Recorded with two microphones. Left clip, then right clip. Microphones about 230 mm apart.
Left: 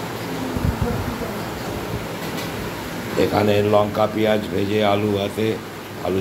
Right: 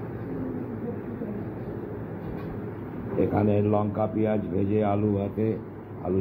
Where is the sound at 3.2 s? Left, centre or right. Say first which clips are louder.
Left 7 dB; centre.